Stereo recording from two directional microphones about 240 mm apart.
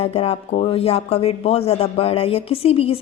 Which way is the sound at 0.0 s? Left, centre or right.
Left.